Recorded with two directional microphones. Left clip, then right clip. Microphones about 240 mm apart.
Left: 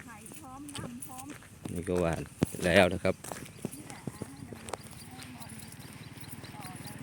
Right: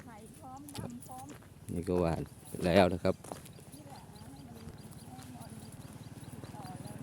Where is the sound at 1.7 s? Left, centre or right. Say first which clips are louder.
Left 2 dB; centre.